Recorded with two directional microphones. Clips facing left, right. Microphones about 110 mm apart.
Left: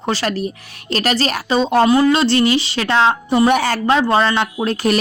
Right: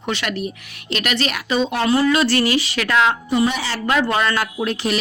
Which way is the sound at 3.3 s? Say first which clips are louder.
Left 5 dB; 50° left (ahead or behind).